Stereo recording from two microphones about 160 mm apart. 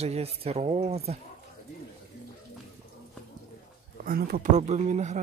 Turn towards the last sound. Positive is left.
turn(degrees=-45)  # may be behind; listen again after turning